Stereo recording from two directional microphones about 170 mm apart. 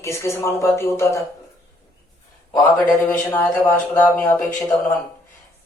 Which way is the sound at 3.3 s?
10° left (ahead or behind).